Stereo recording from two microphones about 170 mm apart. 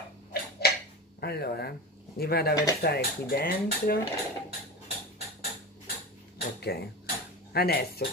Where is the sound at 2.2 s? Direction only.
65° left (ahead or behind).